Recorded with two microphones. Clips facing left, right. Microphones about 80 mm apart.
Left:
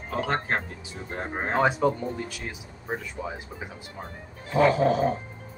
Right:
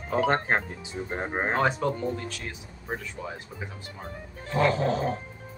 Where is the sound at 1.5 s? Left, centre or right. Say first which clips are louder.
Left 5 dB; centre.